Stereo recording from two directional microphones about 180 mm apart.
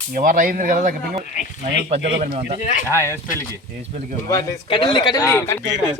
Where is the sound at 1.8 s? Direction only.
35° right (ahead or behind).